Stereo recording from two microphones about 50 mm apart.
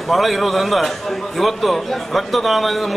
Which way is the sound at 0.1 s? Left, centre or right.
Centre.